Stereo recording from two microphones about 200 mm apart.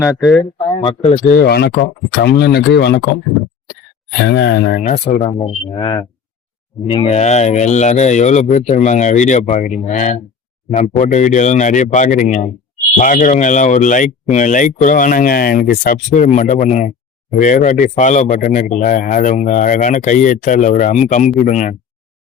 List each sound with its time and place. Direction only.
0.2 s speech: centre (ahead or behind)
0.8 s speech: 30° left (ahead or behind)
1.3 s speech: 50° left (ahead or behind)
4.2 s speech: 60° left (ahead or behind)
4.8 s speech: 35° left (ahead or behind)
5.4 s speech: 25° left (ahead or behind)